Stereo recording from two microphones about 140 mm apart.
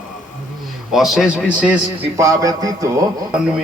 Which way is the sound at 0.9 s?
Centre (ahead or behind).